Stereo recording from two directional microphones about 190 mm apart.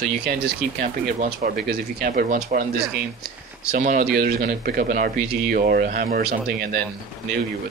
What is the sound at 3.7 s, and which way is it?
Speech, 45° right (ahead or behind).